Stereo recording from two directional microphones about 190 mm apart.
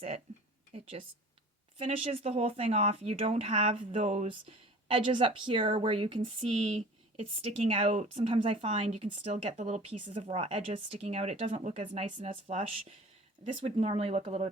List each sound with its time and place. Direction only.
0.7 s speech: 30° right (ahead or behind)